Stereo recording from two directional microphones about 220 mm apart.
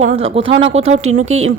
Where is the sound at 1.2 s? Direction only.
70° right (ahead or behind).